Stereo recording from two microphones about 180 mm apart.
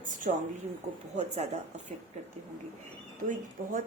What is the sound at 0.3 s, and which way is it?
Speech, 45° right (ahead or behind).